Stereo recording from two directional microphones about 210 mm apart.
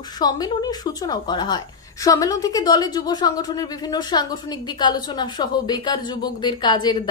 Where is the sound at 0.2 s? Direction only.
20° left (ahead or behind).